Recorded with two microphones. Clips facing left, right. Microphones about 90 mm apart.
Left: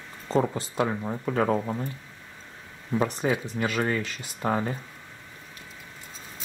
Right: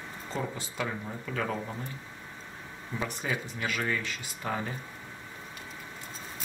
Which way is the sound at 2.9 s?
40° left (ahead or behind).